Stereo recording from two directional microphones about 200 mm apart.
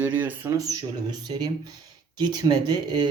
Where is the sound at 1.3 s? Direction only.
25° right (ahead or behind).